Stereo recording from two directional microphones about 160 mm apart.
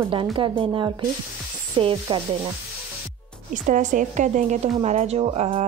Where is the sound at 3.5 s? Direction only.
55° right (ahead or behind).